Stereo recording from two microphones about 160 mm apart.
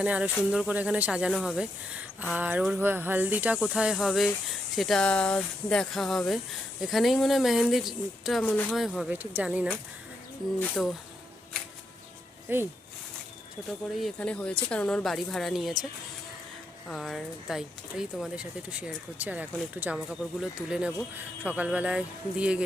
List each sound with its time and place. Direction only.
0.0 s speech: 10° right (ahead or behind)
10.6 s speech: 5° left (ahead or behind)
12.5 s speech: 15° right (ahead or behind)
14.0 s speech: 5° left (ahead or behind)
16.9 s speech: centre (ahead or behind)